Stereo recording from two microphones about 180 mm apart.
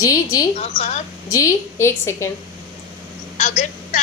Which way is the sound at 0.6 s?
35° left (ahead or behind).